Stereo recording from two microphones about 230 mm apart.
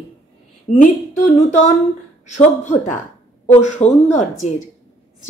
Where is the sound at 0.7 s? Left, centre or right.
Left.